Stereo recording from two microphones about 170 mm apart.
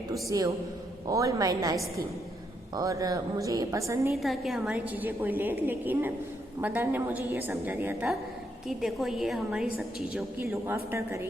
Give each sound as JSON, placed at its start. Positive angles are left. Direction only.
{"t": 0.1, "sound": "a woman's voice", "side_deg": -20}
{"t": 4.1, "sound": "a woman's voice", "side_deg": 0}